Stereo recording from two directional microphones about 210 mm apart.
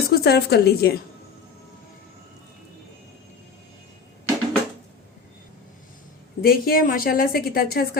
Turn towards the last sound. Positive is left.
turn(degrees=45)  # may be behind; listen again after turning